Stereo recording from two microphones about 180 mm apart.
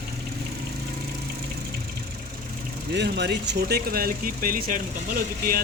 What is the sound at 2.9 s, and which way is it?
Speech, 65° right (ahead or behind).